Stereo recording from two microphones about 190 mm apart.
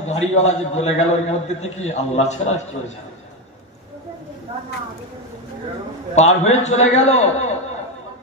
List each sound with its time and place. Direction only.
0.1 s a man's voice: 35° left (ahead or behind)
6.1 s a man's voice: 35° left (ahead or behind)